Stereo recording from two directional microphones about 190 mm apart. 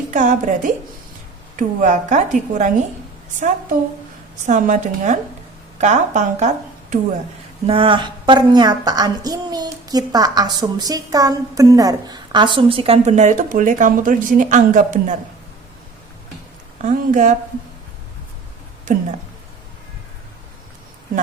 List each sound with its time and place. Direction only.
0.1 s a woman's voice: 40° right (ahead or behind)
4.4 s a woman's voice: 40° right (ahead or behind)
7.7 s a woman's voice: 25° right (ahead or behind); by 15.2 s 40° right (ahead or behind)
16.8 s a woman's voice: 40° right (ahead or behind)
18.9 s speech: 45° right (ahead or behind)